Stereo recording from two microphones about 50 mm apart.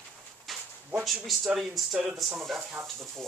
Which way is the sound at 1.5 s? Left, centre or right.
Centre.